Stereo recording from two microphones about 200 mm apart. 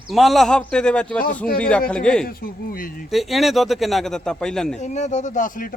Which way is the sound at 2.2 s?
45° left (ahead or behind).